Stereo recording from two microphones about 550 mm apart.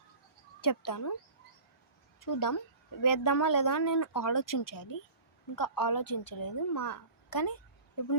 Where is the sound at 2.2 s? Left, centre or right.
Left.